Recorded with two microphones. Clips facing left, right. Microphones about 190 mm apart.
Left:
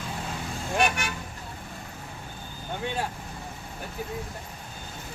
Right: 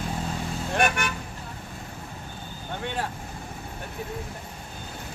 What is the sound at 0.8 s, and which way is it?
Vehicle, 55° right (ahead or behind).